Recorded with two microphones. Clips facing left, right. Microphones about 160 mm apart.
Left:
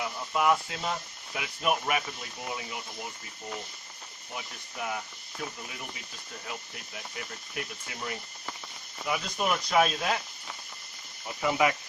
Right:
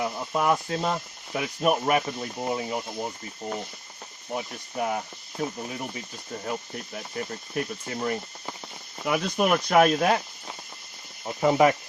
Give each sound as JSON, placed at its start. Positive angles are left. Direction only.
{"t": 0.0, "sound": "speech", "side_deg": -40}
{"t": 4.3, "sound": "speech", "side_deg": -40}
{"t": 9.0, "sound": "speech", "side_deg": -55}
{"t": 11.3, "sound": "speech", "side_deg": -35}